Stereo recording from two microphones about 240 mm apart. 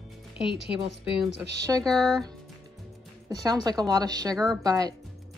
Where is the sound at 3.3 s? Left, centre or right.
Centre.